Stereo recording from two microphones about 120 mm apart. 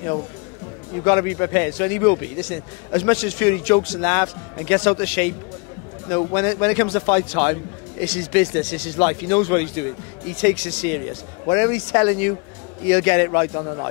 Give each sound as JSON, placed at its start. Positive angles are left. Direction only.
{"t": 1.0, "sound": "a man's voice", "side_deg": 20}